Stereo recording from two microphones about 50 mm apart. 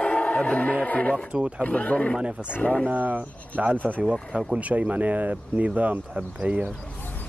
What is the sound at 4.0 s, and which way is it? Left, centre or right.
Speech, centre.